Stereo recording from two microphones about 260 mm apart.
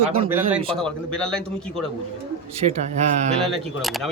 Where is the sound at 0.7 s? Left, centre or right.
Centre.